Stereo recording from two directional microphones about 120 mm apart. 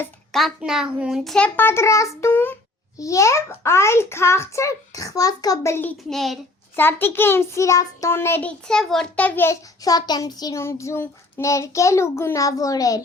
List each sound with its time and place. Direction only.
0.3 s a child's voice: centre (ahead or behind)
1.5 s child singing: 20° left (ahead or behind)
6.1 s a child's voice: centre (ahead or behind)
6.7 s child singing: 20° left (ahead or behind)
9.8 s child singing: 30° left (ahead or behind)